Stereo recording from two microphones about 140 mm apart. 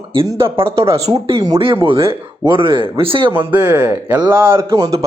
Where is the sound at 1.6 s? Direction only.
40° right (ahead or behind).